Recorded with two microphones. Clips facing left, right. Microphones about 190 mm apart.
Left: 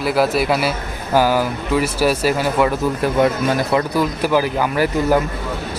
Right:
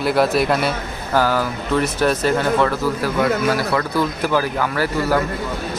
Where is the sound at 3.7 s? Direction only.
15° left (ahead or behind).